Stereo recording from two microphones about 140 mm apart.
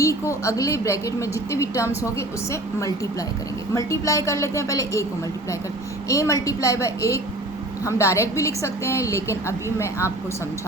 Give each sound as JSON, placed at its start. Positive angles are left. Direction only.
{"t": 0.0, "sound": "a woman's voice", "side_deg": 20}
{"t": 6.1, "sound": "a woman's voice", "side_deg": 20}